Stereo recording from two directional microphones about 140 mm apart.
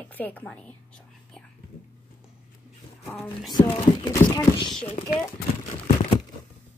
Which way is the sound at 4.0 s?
20° left (ahead or behind).